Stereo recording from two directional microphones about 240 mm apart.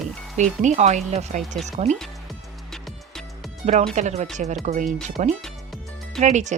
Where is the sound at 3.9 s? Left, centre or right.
Right.